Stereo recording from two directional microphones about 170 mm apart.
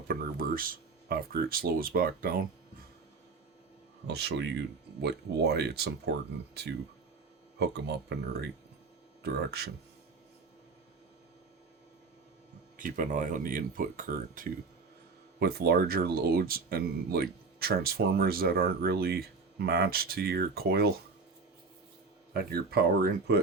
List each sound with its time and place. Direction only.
0.1 s speech: 55° right (ahead or behind)
4.0 s speech: 80° right
5.0 s speech: 75° right (ahead or behind)
12.7 s speech: 50° right (ahead or behind)
15.4 s speech: 70° right (ahead or behind)
22.3 s speech: 65° right (ahead or behind)